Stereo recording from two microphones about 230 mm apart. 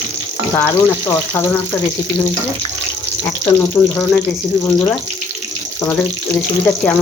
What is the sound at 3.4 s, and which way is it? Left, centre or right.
Speech, right.